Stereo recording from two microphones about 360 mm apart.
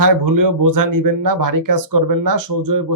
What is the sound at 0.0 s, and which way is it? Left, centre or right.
Speech, right.